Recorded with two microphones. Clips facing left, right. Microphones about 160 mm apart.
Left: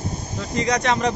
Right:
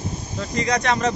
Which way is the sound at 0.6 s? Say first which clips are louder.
Even; 15° left (ahead or behind).